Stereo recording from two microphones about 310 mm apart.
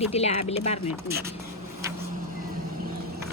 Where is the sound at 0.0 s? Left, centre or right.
Centre.